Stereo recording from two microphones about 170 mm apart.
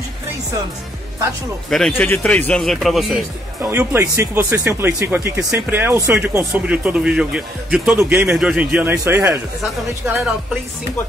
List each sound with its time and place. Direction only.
1.7 s speech: 5° left (ahead or behind)
3.6 s speech: 15° right (ahead or behind)
8.3 s speech: 5° right (ahead or behind)